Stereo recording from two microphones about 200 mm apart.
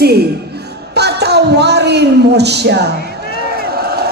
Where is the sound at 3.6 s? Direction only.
50° right (ahead or behind).